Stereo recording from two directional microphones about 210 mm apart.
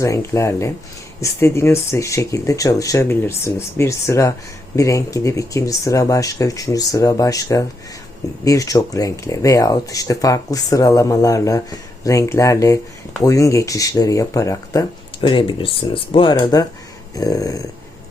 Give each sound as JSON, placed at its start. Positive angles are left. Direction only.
{"t": 0.0, "sound": "speech", "side_deg": 15}